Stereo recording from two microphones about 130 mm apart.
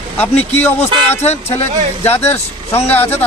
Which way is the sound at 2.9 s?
15° left (ahead or behind).